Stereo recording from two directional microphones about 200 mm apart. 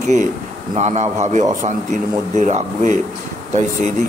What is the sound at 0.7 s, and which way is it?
Speech, 35° right (ahead or behind).